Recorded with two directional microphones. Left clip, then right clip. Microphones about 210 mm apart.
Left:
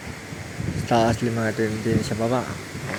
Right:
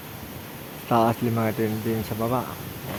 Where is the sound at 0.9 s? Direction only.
Centre (ahead or behind).